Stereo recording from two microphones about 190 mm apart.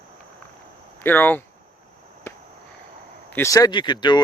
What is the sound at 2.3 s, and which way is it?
Cricket, 15° left (ahead or behind).